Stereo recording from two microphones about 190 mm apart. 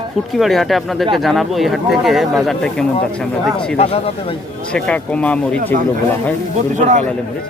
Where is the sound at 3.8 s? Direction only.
30° left (ahead or behind).